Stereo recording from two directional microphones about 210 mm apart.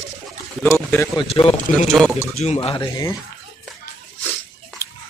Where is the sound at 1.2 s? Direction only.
25° left (ahead or behind).